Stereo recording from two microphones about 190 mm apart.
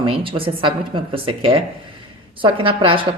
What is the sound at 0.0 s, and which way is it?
A woman's voice, 30° right (ahead or behind).